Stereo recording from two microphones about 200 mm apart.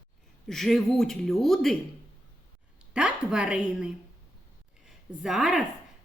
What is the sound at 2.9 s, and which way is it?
A woman's voice, 5° right (ahead or behind).